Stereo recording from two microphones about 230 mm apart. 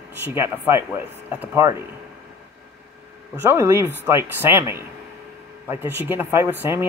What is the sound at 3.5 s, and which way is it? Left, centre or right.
Speech, centre.